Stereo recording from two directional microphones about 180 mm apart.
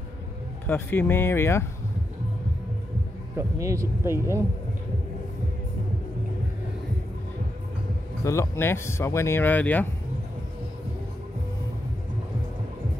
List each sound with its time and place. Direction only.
0.7 s speech: 10° left (ahead or behind)
3.3 s speech: 15° right (ahead or behind)
8.2 s speech: 15° left (ahead or behind)